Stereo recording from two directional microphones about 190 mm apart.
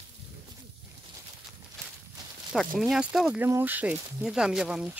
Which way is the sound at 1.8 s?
5° left (ahead or behind).